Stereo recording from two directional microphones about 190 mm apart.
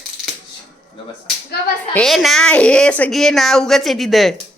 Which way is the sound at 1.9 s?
Centre (ahead or behind).